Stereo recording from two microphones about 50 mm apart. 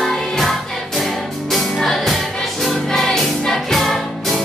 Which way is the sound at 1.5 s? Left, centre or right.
Centre.